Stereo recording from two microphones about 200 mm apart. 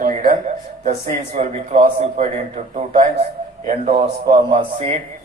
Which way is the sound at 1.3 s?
35° right (ahead or behind).